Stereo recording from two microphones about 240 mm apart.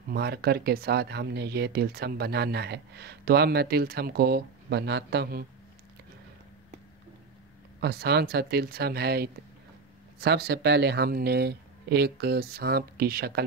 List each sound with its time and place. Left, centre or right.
0.1 s speech: right
7.8 s speech: right